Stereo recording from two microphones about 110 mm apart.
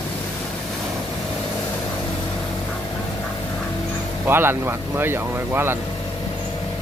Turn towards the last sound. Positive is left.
turn(degrees=-20)  # may be behind; listen again after turning